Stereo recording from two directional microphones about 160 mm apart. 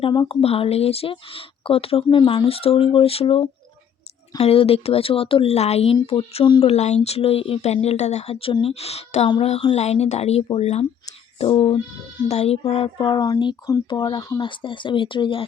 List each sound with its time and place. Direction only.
0.0 s speech: 30° left (ahead or behind)
12.7 s a sound: 35° left (ahead or behind)
14.0 s speech: 30° left (ahead or behind)